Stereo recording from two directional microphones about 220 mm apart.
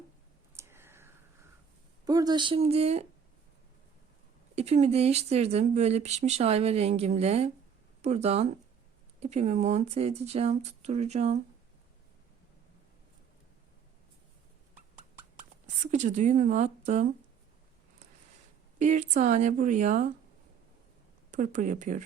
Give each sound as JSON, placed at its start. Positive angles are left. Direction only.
{"t": 0.5, "sound": "whispering", "side_deg": -10}
{"t": 2.0, "sound": "speech", "side_deg": -15}
{"t": 4.5, "sound": "speech", "side_deg": -30}
{"t": 15.6, "sound": "speech", "side_deg": -30}
{"t": 18.8, "sound": "speech", "side_deg": -35}
{"t": 21.2, "sound": "speech", "side_deg": -35}